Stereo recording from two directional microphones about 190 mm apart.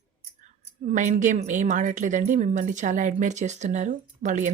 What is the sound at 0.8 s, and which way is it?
Speech, 40° right (ahead or behind).